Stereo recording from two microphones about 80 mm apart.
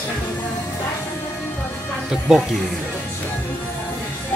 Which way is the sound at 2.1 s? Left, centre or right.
Centre.